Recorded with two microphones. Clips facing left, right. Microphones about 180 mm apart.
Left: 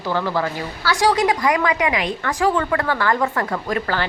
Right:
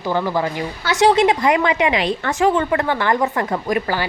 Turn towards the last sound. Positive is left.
turn(degrees=-15)  # may be behind; listen again after turning